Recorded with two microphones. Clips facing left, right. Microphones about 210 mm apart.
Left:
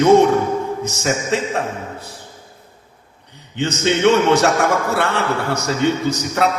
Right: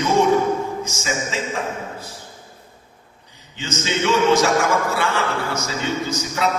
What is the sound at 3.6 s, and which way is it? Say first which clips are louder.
A man's voice: left 8 dB; 65° left (ahead or behind).